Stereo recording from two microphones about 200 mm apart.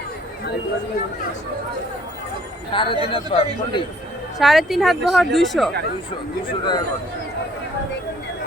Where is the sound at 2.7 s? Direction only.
25° left (ahead or behind).